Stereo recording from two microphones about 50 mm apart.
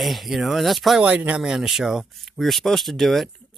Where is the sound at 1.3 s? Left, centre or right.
Centre.